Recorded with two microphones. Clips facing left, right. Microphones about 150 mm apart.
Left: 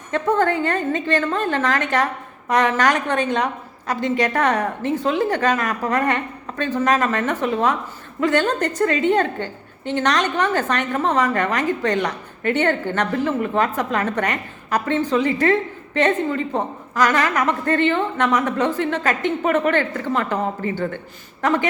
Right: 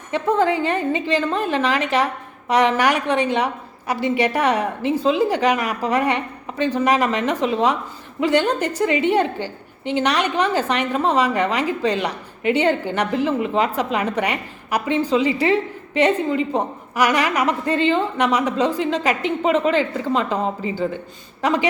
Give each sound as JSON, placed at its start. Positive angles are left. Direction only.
{"t": 0.7, "sound": "a woman's voice", "side_deg": -10}